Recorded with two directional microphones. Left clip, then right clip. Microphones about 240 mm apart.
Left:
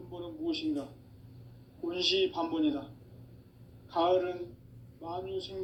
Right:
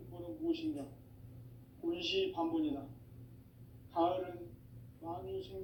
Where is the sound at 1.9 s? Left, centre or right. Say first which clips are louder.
Left 6 dB; left.